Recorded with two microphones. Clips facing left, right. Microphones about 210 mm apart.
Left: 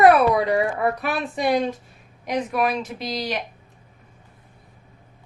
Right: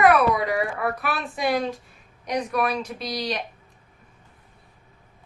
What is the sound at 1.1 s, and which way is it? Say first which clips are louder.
Speech: left 3 dB; centre (ahead or behind).